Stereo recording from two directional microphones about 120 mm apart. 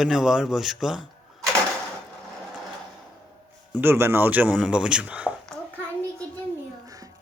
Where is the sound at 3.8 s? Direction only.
20° right (ahead or behind).